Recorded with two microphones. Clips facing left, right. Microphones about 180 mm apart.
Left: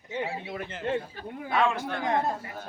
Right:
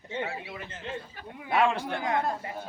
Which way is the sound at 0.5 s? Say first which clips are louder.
Left 7 dB; 60° left (ahead or behind).